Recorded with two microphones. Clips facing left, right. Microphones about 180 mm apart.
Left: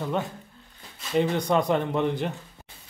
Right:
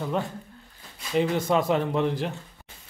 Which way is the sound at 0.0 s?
Centre (ahead or behind).